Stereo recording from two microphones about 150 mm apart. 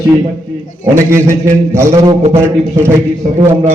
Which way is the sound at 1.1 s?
15° right (ahead or behind).